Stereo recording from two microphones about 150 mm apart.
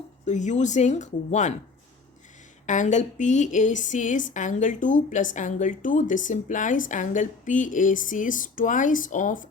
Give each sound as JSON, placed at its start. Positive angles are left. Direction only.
{"t": 0.3, "sound": "speech", "side_deg": 55}
{"t": 2.6, "sound": "a woman's voice", "side_deg": 55}